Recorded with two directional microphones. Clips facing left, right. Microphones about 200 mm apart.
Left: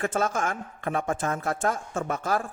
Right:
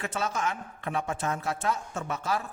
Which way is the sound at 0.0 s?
50° left (ahead or behind).